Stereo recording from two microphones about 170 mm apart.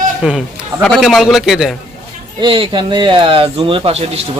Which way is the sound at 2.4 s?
30° right (ahead or behind).